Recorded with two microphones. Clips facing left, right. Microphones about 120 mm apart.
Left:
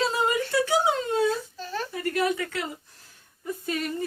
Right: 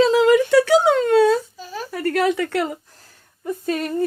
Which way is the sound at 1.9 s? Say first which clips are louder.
Right 7 dB; 75° right (ahead or behind).